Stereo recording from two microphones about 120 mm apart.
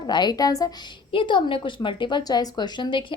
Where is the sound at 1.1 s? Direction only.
45° left (ahead or behind).